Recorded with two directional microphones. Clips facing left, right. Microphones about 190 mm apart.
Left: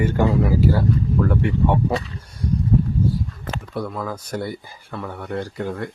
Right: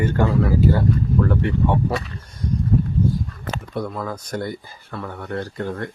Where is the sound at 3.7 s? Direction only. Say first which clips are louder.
Even; 5° left (ahead or behind).